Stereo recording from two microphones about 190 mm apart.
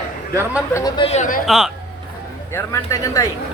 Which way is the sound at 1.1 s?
45° left (ahead or behind).